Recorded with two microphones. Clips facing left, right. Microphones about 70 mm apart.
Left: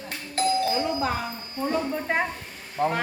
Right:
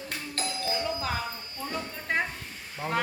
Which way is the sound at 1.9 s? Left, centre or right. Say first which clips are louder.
Left 4 dB; left.